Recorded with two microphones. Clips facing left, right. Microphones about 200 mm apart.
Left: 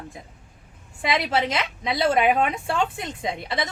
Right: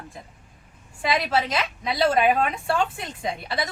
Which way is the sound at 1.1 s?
20° left (ahead or behind).